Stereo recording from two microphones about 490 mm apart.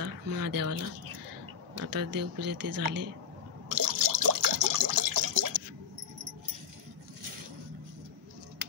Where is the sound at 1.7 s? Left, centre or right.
Right.